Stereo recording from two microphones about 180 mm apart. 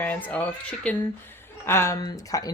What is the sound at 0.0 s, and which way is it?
A woman's voice, 10° left (ahead or behind).